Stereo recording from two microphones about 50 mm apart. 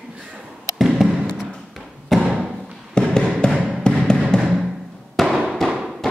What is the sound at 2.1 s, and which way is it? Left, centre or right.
Thump, centre.